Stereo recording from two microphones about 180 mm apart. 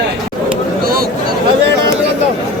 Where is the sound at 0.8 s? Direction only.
55° right (ahead or behind).